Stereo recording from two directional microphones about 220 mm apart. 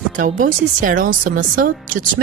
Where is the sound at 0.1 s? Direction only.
35° right (ahead or behind).